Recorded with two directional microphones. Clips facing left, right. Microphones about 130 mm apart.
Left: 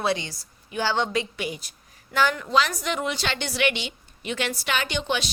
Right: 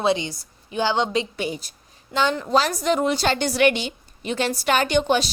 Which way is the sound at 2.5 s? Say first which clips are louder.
Right 4 dB; 35° right (ahead or behind).